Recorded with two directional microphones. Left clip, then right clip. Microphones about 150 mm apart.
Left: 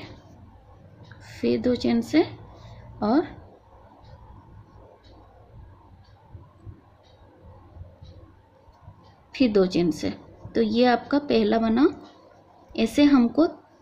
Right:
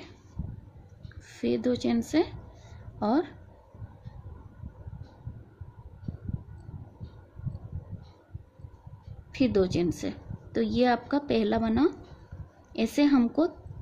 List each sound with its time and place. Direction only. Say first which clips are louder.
1.2 s speech: left 4 dB; 20° right (ahead or behind)
9.3 s a woman's voice: left 5 dB; 15° right (ahead or behind)